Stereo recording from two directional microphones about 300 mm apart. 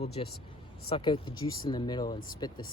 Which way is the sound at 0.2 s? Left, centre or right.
Centre.